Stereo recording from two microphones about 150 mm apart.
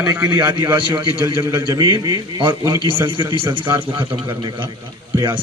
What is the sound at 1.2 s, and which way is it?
A man's voice, 15° right (ahead or behind).